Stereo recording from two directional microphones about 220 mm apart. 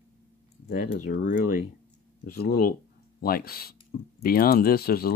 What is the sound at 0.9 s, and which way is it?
Speech, 40° left (ahead or behind).